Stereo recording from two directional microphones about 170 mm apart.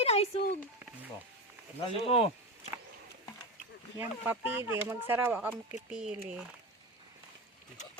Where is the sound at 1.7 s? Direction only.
35° left (ahead or behind).